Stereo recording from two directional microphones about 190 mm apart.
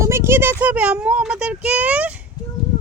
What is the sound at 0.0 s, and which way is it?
A child's voice, 15° right (ahead or behind).